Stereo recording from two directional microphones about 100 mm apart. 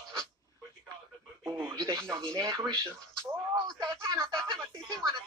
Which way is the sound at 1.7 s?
35° right (ahead or behind).